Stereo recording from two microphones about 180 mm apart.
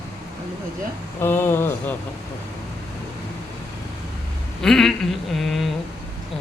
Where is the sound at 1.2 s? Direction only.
15° left (ahead or behind).